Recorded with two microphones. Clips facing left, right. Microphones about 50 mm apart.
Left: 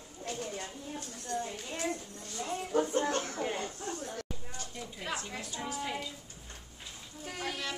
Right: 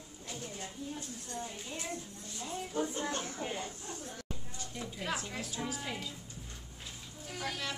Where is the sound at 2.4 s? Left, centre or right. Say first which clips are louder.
Left 5 dB; left.